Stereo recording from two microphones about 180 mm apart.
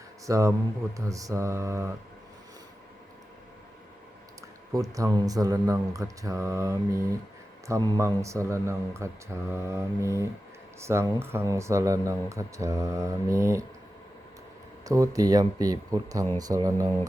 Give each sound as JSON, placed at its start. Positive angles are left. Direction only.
{"t": 0.3, "sound": "speech", "side_deg": -15}
{"t": 4.7, "sound": "speech", "side_deg": -20}
{"t": 14.8, "sound": "speech", "side_deg": -20}